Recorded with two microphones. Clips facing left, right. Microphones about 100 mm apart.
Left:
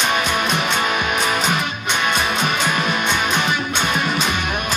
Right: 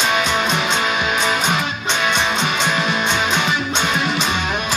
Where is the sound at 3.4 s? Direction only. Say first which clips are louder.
Right 1 dB; 45° left (ahead or behind).